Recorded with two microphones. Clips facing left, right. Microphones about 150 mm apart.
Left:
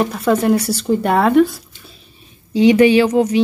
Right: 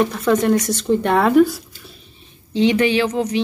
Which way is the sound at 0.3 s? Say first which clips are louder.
Left 2 dB; 10° left (ahead or behind).